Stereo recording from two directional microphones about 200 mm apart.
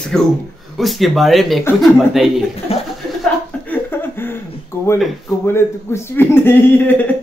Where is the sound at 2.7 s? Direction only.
30° left (ahead or behind).